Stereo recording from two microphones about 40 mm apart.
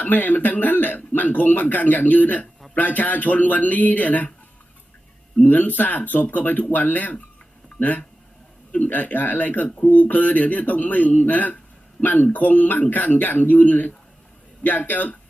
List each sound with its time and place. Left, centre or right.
0.0 s speech: left
5.5 s speech: left